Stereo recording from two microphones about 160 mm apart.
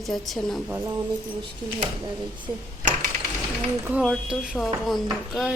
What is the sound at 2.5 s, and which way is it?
Speech, 25° right (ahead or behind).